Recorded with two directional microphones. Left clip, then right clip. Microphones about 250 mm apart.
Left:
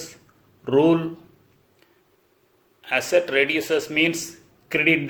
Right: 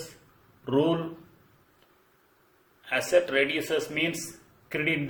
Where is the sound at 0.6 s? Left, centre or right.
Left.